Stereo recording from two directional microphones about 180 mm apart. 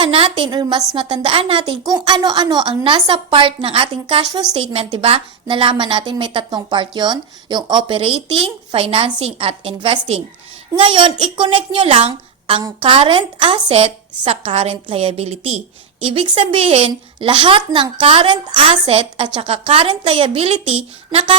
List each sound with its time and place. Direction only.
0.0 s a woman's voice: 30° right (ahead or behind)